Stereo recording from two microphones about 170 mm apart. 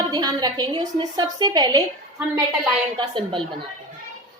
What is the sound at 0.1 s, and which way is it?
A woman's voice, 25° right (ahead or behind).